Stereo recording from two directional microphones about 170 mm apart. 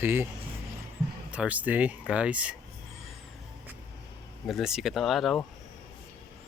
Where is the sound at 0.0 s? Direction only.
15° right (ahead or behind).